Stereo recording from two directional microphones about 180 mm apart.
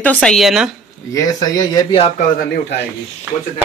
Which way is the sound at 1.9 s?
35° left (ahead or behind).